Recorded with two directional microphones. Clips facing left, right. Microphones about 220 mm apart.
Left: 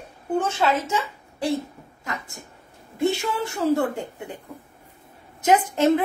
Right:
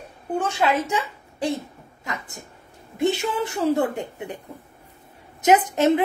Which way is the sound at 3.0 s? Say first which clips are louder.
Right 1 dB; 20° right (ahead or behind).